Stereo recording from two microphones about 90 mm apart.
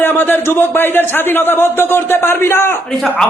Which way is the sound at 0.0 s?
25° left (ahead or behind).